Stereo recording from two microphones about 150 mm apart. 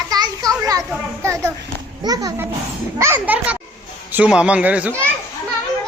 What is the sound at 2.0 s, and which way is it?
A child's voice, 25° right (ahead or behind).